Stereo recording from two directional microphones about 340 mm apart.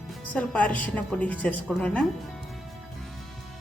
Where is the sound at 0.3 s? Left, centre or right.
Centre.